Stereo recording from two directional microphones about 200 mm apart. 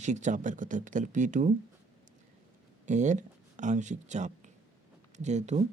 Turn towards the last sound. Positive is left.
turn(degrees=-35)  # may be behind; listen again after turning